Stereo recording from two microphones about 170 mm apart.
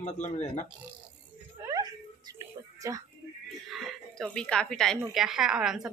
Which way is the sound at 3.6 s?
Centre (ahead or behind).